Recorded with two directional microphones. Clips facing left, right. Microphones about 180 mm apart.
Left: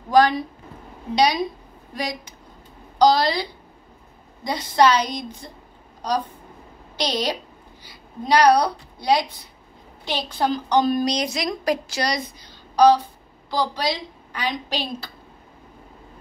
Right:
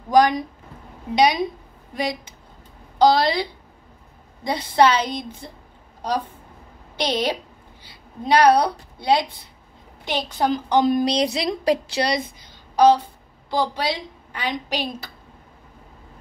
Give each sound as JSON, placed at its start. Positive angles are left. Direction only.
{"t": 0.1, "sound": "a woman's voice", "side_deg": -15}
{"t": 3.0, "sound": "a woman's voice", "side_deg": -25}
{"t": 4.5, "sound": "a woman's voice", "side_deg": -25}
{"t": 7.0, "sound": "a woman's voice", "side_deg": -25}